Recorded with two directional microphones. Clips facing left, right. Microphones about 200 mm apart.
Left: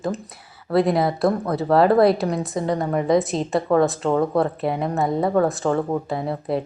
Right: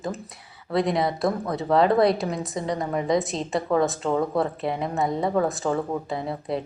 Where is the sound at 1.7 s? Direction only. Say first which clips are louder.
Left 3 dB; 30° left (ahead or behind).